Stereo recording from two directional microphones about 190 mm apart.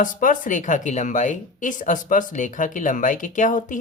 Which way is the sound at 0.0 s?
45° left (ahead or behind).